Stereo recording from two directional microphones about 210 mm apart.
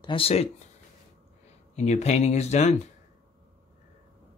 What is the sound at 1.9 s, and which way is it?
Speech, 30° left (ahead or behind).